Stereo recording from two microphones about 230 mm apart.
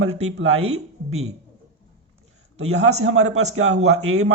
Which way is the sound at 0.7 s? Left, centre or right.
Right.